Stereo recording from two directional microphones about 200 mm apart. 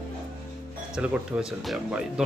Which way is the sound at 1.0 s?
5° right (ahead or behind).